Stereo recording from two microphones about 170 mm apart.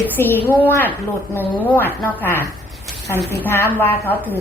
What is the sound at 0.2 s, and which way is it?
A woman's voice, 10° left (ahead or behind).